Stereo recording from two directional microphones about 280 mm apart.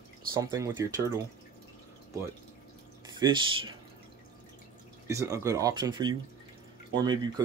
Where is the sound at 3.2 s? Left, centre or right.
Centre.